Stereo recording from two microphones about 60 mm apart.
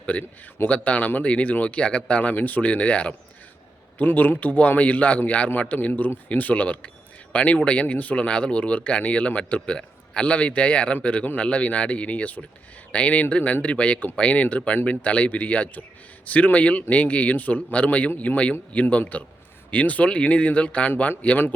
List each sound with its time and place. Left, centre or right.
0.0 s speech: left
2.3 s speech: left